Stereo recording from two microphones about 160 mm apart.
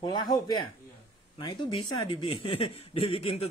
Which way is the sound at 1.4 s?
30° left (ahead or behind).